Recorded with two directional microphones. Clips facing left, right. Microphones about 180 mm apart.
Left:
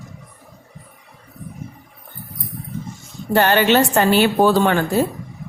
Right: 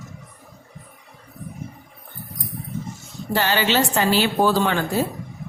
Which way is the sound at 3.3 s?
55° left (ahead or behind).